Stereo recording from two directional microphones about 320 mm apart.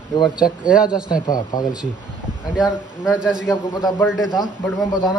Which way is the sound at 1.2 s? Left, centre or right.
Centre.